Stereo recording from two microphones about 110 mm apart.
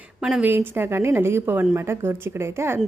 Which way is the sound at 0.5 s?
20° right (ahead or behind).